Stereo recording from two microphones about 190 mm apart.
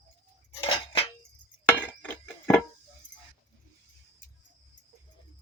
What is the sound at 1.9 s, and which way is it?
Music, 10° left (ahead or behind).